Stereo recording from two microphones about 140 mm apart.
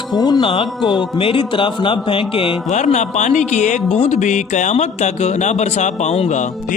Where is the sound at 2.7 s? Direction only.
55° left (ahead or behind).